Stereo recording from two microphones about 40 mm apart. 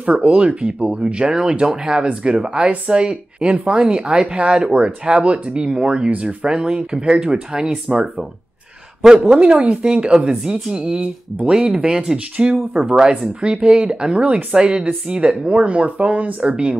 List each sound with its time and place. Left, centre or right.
0.0 s speech: right
9.0 s a man's voice: centre
9.8 s speech: right
10.1 s speech: centre; by 16.5 s right